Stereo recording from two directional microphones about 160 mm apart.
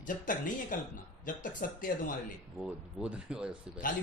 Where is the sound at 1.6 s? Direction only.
60° left (ahead or behind).